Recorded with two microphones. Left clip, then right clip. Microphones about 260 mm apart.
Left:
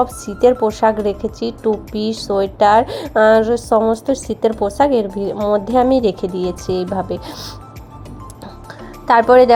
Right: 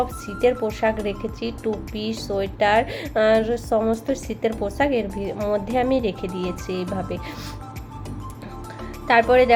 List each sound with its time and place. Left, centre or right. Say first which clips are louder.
0.0 s a woman's voice: left 7 dB; left
5.4 s speech: left 7 dB; centre
5.7 s a woman's voice: left 9 dB; left
9.0 s a woman's voice: left 6 dB; left